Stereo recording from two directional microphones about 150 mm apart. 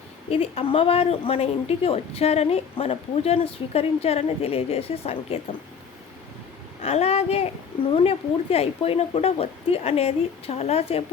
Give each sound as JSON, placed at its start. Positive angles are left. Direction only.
{"t": 0.3, "sound": "speech", "side_deg": 40}
{"t": 6.8, "sound": "speech", "side_deg": 45}